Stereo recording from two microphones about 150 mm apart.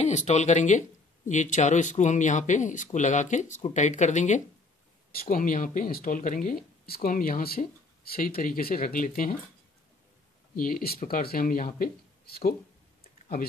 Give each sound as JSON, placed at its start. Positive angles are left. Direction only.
{"t": 0.0, "sound": "speech", "side_deg": 50}
{"t": 8.4, "sound": "speech", "side_deg": 75}
{"t": 10.5, "sound": "speech", "side_deg": 70}
{"t": 11.1, "sound": "speech", "side_deg": 70}